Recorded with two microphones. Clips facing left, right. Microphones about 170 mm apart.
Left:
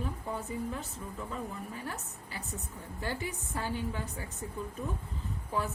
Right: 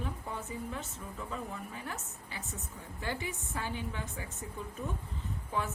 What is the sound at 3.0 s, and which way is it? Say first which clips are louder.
A woman's voice: left 1 dB; 40° left (ahead or behind).